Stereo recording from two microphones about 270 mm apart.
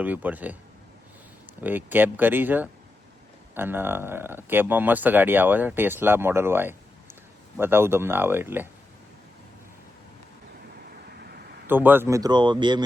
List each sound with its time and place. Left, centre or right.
0.0 s speech: centre
1.6 s speech: centre
11.1 s a sound: right
11.7 s speech: centre